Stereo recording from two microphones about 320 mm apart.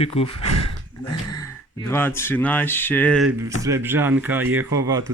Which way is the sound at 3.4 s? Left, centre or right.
Centre.